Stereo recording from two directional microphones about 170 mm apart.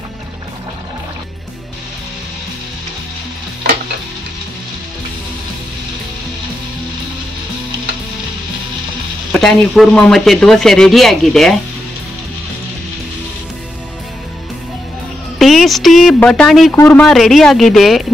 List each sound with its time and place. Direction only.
9.3 s speech: centre (ahead or behind)
15.3 s speech: centre (ahead or behind)
16.7 s a man's voice: 15° left (ahead or behind)
17.0 s speech: centre (ahead or behind)